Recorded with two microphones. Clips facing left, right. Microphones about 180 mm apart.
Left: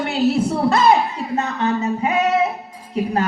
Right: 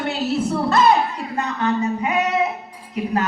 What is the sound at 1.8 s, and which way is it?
Speech, 25° left (ahead or behind).